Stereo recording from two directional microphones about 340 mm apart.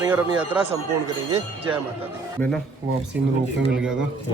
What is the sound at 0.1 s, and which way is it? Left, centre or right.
Speech, centre.